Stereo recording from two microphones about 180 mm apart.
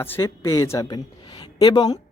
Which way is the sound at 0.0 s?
15° left (ahead or behind).